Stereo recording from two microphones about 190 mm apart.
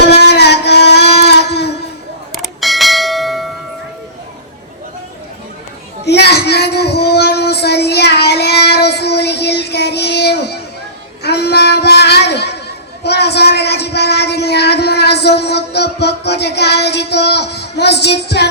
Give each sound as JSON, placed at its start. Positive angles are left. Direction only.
{"t": 0.2, "sound": "a sound", "side_deg": 60}
{"t": 2.3, "sound": "bell", "side_deg": 0}
{"t": 6.1, "sound": "child singing", "side_deg": 60}
{"t": 11.2, "sound": "chatter", "side_deg": 60}